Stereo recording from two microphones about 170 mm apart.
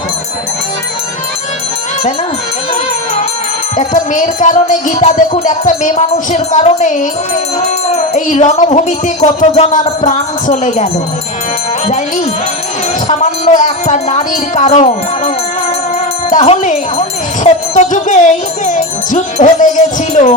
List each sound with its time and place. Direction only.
3.8 s music: 50° left (ahead or behind)
13.1 s music: 45° left (ahead or behind)
16.3 s music: 45° left (ahead or behind)